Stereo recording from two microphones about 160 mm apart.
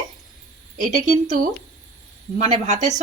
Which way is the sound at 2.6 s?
45° right (ahead or behind).